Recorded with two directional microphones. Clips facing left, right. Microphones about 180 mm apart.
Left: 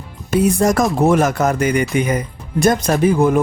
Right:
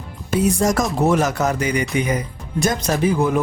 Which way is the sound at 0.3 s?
60° left (ahead or behind).